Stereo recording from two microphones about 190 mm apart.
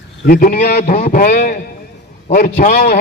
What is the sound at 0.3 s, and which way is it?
A man's voice, 45° left (ahead or behind).